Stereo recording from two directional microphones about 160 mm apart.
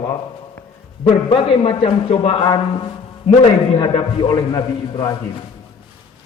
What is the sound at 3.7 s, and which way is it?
Speech, 30° left (ahead or behind).